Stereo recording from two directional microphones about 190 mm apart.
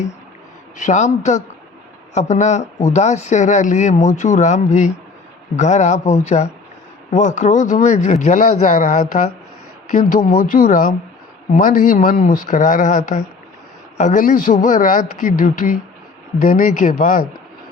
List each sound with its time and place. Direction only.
0.8 s speech: 40° left (ahead or behind)